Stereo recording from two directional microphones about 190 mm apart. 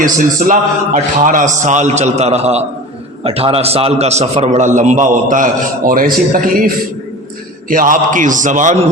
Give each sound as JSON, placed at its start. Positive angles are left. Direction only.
{"t": 0.0, "sound": "a man's voice", "side_deg": -45}
{"t": 7.7, "sound": "a man's voice", "side_deg": -45}